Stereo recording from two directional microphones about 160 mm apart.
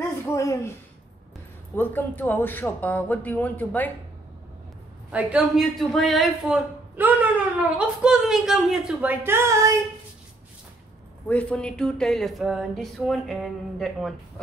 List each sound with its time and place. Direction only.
0.2 s a sound: 20° left (ahead or behind)
1.8 s a man's voice: 15° left (ahead or behind)
5.1 s a man's voice: 5° right (ahead or behind); by 9.8 s 20° right (ahead or behind)
11.2 s speech: 10° left (ahead or behind)